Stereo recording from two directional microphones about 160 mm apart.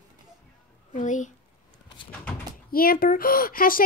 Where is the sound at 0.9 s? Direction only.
50° left (ahead or behind).